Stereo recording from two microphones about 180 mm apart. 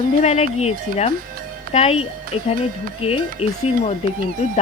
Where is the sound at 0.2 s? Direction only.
35° left (ahead or behind).